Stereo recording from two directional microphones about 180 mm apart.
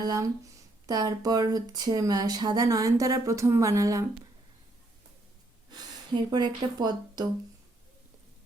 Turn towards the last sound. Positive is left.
turn(degrees=-25)  # may be behind; listen again after turning